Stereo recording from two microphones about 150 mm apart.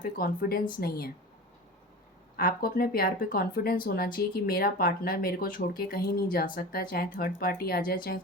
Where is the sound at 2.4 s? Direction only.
75° left (ahead or behind).